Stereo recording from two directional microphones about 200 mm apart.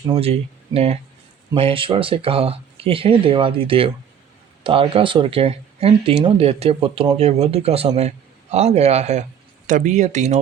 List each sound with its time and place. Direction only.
0.2 s speech: 30° right (ahead or behind)